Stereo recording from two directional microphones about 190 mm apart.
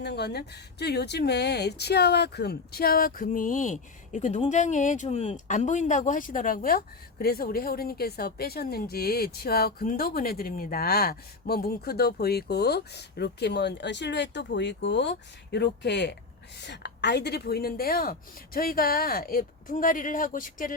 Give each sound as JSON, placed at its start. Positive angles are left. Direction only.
{"t": 0.0, "sound": "speech", "side_deg": 60}